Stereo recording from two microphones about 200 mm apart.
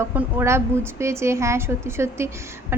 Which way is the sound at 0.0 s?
10° right (ahead or behind).